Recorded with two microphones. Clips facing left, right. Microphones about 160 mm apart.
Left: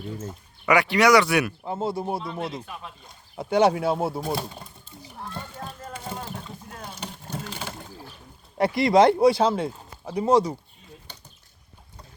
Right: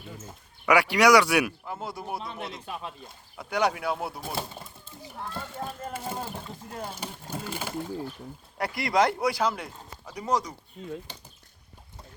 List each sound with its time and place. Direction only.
0.6 s speech: 10° right (ahead or behind)
1.6 s speech: 25° left (ahead or behind)
3.3 s speech: 25° left (ahead or behind)
6.9 s vehicle: 10° right (ahead or behind)
8.5 s speech: 25° left (ahead or behind)